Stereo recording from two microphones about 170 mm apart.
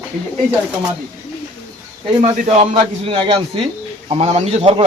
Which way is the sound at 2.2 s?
35° right (ahead or behind).